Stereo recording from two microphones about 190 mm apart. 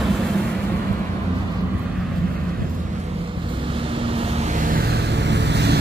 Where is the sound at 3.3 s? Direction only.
25° right (ahead or behind).